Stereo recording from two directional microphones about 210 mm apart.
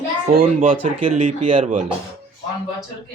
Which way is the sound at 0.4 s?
35° right (ahead or behind).